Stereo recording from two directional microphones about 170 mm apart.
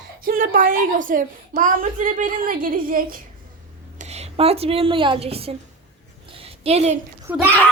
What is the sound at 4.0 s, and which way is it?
A woman's voice, 40° right (ahead or behind).